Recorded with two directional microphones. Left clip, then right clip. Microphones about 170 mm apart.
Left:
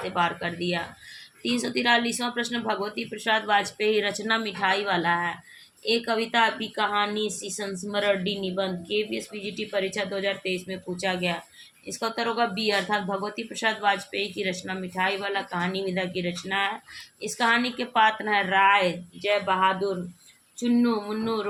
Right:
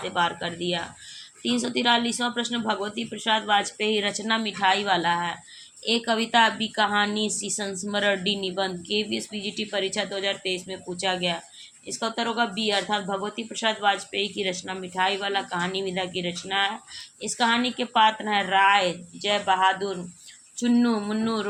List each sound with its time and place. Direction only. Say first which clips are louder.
0.1 s a woman's voice: right 1 dB; 20° right (ahead or behind)